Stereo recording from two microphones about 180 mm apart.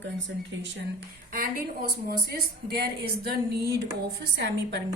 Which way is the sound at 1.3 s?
50° right (ahead or behind).